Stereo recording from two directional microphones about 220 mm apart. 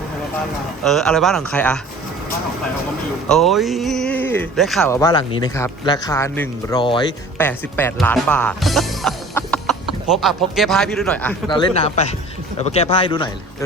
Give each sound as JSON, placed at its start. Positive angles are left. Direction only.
{"t": 0.9, "sound": "speech", "side_deg": 0}
{"t": 3.2, "sound": "speech", "side_deg": 0}
{"t": 4.9, "sound": "speech", "side_deg": 15}
{"t": 7.3, "sound": "speech", "side_deg": 10}
{"t": 11.4, "sound": "speech", "side_deg": 25}